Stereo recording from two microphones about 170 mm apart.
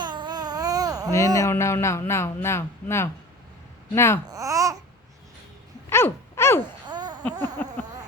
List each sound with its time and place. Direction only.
0.0 s babbling: 25° right (ahead or behind)
1.4 s a man's voice: 15° left (ahead or behind)
4.3 s babbling: 20° right (ahead or behind)
5.9 s dog: 15° left (ahead or behind)
6.8 s a sound: 25° right (ahead or behind)
7.4 s a sound: 10° left (ahead or behind)